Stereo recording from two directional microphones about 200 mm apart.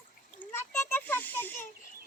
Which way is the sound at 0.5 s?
10° left (ahead or behind).